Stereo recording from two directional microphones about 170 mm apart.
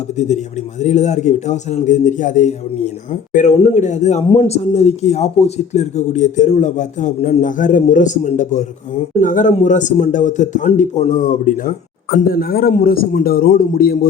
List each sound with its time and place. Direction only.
0.8 s speech: 40° left (ahead or behind)
4.2 s speech: 35° left (ahead or behind)
12.1 s a man's voice: 60° left (ahead or behind)